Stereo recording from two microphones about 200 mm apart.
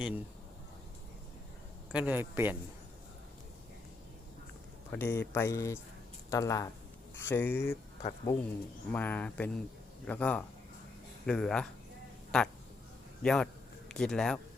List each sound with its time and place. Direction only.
1.9 s a man's voice: 5° right (ahead or behind)
4.9 s speech: 10° left (ahead or behind)
8.0 s speech: 20° left (ahead or behind)
8.9 s speech: 10° left (ahead or behind)